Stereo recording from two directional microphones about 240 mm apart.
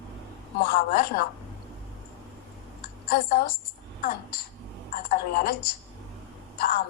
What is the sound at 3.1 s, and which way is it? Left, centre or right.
Speech, left.